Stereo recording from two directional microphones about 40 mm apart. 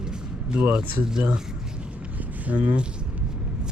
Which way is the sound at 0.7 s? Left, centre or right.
Centre.